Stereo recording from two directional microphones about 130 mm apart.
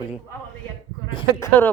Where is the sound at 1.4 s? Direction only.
20° left (ahead or behind).